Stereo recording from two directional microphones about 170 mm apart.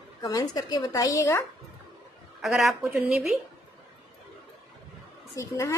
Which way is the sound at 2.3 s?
Centre (ahead or behind).